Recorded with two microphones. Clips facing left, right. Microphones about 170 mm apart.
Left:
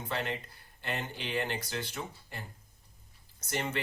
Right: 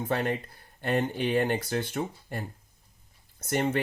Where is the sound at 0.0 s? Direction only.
50° right (ahead or behind).